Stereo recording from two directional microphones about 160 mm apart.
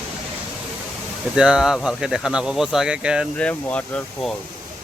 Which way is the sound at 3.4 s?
10° left (ahead or behind).